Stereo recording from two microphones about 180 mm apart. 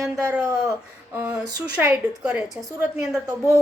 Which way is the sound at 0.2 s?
15° right (ahead or behind).